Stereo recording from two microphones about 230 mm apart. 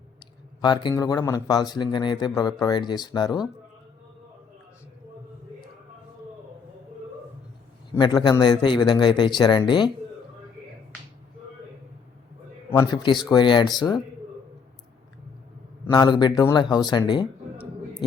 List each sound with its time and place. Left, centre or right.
0.2 s speech: centre
7.9 s a man's voice: centre
12.7 s a man's voice: centre
15.9 s a man's voice: centre